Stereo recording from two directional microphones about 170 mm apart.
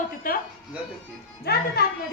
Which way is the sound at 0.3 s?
55° left (ahead or behind).